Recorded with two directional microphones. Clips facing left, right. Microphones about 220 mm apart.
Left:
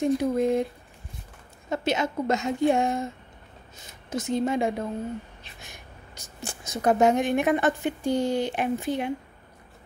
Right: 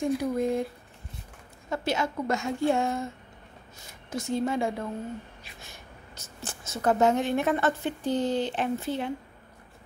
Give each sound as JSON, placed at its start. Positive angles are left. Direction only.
{"t": 0.0, "sound": "a woman's voice", "side_deg": 20}
{"t": 1.7, "sound": "a woman's voice", "side_deg": 20}